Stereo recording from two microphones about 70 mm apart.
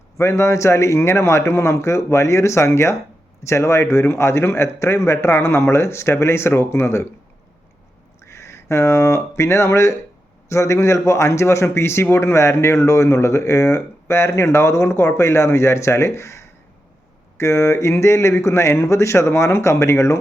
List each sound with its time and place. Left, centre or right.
0.2 s a man's voice: left
8.2 s a man's voice: left